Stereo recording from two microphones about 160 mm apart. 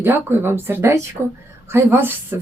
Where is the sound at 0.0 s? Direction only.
15° right (ahead or behind).